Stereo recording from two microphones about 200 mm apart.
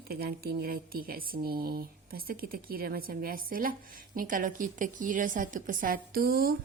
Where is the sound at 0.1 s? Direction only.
50° right (ahead or behind).